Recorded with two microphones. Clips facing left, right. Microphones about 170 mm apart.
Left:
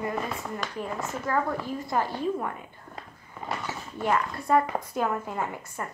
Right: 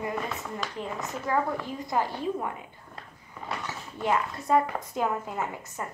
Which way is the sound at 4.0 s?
20° right (ahead or behind).